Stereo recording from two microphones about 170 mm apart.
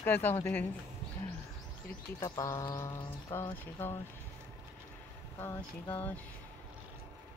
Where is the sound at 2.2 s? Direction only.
20° left (ahead or behind).